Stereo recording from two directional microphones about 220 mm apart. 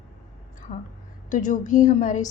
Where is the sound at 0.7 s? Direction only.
35° left (ahead or behind).